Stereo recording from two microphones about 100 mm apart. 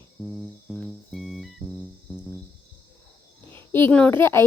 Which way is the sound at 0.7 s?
Centre (ahead or behind).